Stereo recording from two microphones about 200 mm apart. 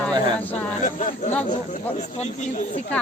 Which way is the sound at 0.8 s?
40° left (ahead or behind).